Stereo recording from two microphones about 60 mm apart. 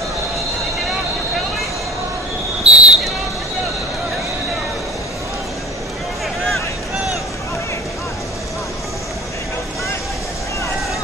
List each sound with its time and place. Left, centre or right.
2.6 s basketball bounce: centre
6.4 s vehicle: centre